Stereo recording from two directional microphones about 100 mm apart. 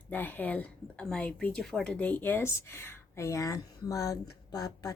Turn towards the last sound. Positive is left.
turn(degrees=35)  # may be behind; listen again after turning